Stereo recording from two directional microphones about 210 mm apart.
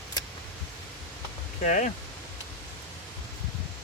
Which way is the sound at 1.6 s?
35° left (ahead or behind).